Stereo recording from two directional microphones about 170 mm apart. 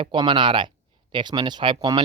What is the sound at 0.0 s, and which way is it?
Speech, 30° right (ahead or behind).